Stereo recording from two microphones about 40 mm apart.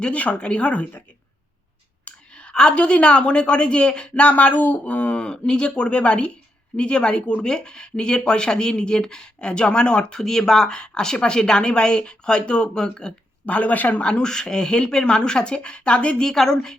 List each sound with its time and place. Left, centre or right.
0.0 s speech: left
2.0 s speech: left
4.1 s speech: left
5.1 s speech: left
13.4 s speech: left
14.0 s speech: left
16.2 s a woman's voice: centre